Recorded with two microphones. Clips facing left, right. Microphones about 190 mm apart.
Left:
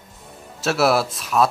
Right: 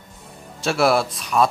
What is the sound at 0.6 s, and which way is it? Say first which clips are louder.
Speech: even; centre (ahead or behind).